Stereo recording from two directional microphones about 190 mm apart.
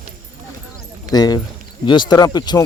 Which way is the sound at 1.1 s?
20° left (ahead or behind).